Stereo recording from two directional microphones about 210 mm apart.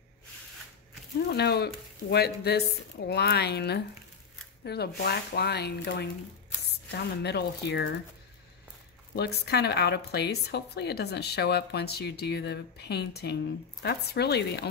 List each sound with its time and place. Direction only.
1.3 s speech: 50° left (ahead or behind)
7.2 s speech: 50° left (ahead or behind)
9.1 s speech: 50° left (ahead or behind)